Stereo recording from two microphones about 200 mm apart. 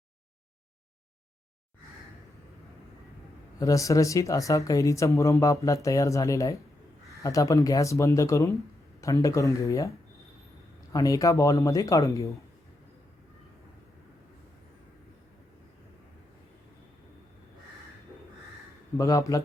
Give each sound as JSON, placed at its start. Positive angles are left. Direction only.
{"t": 3.6, "sound": "speech", "side_deg": 15}
{"t": 10.9, "sound": "speech", "side_deg": 15}
{"t": 18.9, "sound": "speech", "side_deg": 15}